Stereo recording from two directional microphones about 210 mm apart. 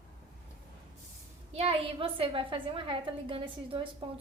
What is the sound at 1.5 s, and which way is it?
A woman's voice, 25° right (ahead or behind).